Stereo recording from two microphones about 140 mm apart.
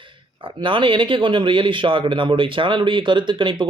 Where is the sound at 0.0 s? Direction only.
35° right (ahead or behind).